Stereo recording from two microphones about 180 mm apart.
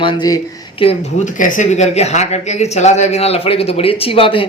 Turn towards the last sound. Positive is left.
turn(degrees=30)  # may be behind; listen again after turning